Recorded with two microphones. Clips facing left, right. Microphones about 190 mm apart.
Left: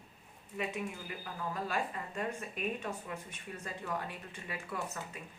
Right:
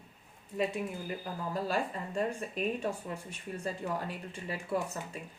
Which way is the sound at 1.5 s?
30° right (ahead or behind).